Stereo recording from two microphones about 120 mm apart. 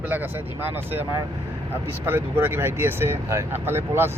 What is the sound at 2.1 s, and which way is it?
Speech, 20° right (ahead or behind).